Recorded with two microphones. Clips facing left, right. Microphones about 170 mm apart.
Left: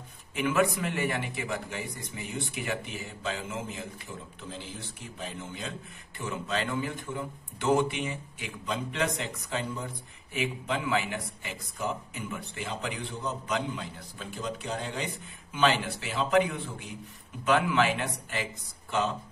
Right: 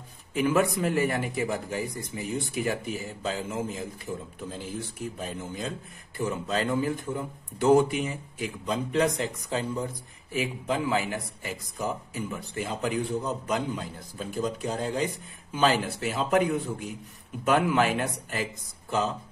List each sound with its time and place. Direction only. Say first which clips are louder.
0.3 s a man's voice: right 2 dB; 35° right (ahead or behind)
5.2 s a man's voice: right 1 dB; 40° right (ahead or behind)